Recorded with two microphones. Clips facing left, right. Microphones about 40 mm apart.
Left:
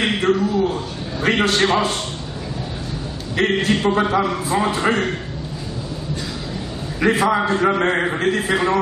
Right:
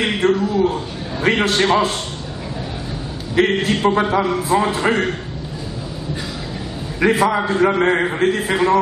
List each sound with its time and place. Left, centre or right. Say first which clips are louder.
0.0 s a man's voice: right 1 dB; centre
3.3 s a man's voice: right 2 dB; centre
7.0 s a man's voice: right 1 dB; centre